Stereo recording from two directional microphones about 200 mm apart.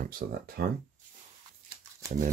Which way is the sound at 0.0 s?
50° right (ahead or behind).